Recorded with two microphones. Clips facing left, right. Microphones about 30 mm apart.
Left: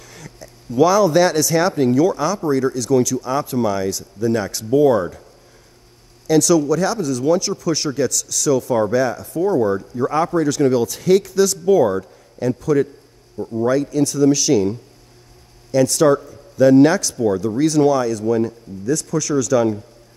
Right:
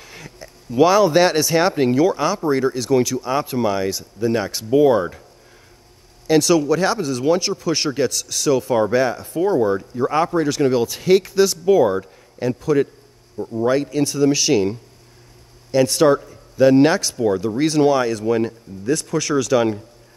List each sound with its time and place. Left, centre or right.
0.0 s speech: right
6.2 s a man's voice: right
9.7 s a man's voice: right
13.4 s a man's voice: centre
13.7 s a man's voice: right